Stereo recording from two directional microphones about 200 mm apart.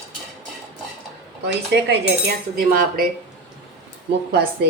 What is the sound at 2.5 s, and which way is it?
Speech, 45° right (ahead or behind).